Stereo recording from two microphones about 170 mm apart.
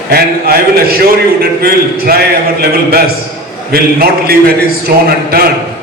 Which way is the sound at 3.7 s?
65° right (ahead or behind).